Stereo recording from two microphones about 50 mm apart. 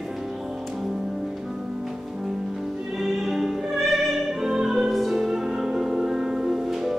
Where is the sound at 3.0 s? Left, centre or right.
Centre.